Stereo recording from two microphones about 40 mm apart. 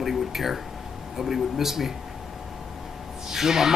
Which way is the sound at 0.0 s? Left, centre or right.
Centre.